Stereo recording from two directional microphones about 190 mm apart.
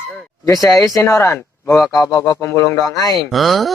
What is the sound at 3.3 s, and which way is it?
Speech, centre (ahead or behind).